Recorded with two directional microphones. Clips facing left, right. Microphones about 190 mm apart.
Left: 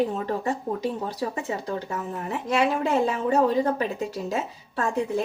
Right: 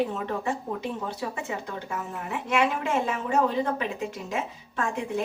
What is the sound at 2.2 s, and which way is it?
A woman's voice, 35° left (ahead or behind).